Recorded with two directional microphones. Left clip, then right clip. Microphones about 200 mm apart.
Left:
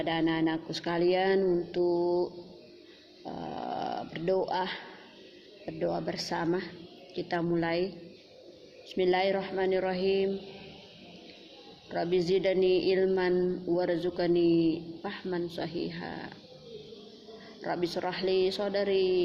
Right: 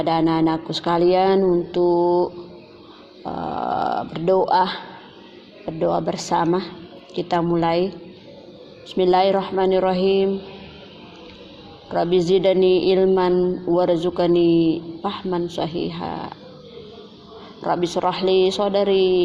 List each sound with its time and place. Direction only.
0.0 s speech: 30° right (ahead or behind)
12.1 s speech: 30° right (ahead or behind)
17.7 s speech: 30° right (ahead or behind)